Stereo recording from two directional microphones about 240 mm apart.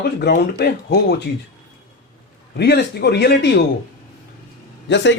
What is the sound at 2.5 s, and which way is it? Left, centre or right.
A man's voice, left.